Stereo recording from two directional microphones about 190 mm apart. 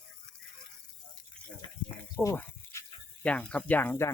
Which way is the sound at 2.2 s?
15° left (ahead or behind).